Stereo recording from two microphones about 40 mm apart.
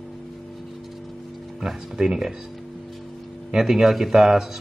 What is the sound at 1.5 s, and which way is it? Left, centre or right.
Speech, centre.